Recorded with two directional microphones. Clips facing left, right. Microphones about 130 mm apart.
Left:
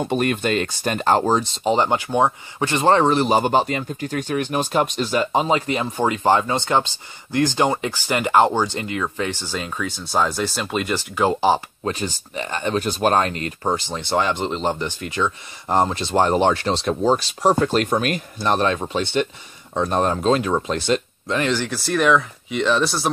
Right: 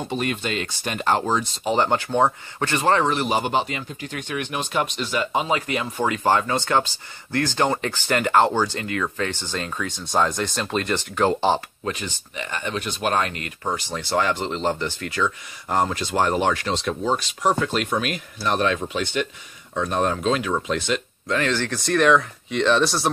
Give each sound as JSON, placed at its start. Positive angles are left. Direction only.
{"t": 0.1, "sound": "speech", "side_deg": 50}
{"t": 2.8, "sound": "speech", "side_deg": 30}
{"t": 11.8, "sound": "speech", "side_deg": 35}
{"t": 21.3, "sound": "speech", "side_deg": 15}